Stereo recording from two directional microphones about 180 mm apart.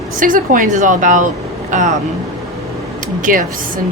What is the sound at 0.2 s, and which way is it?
A woman's voice, 50° right (ahead or behind).